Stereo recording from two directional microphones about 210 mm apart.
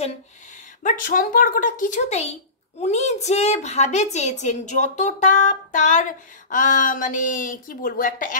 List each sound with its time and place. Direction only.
0.8 s a child's voice: 40° left (ahead or behind)